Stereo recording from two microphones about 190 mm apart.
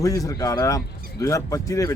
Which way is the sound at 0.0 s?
20° left (ahead or behind).